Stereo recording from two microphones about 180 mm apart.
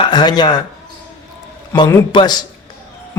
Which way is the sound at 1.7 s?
20° left (ahead or behind).